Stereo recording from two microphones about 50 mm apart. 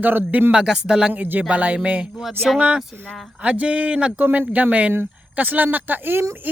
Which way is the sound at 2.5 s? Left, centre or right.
Right.